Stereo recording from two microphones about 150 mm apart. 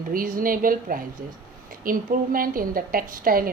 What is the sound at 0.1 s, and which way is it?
Speech, 70° right (ahead or behind).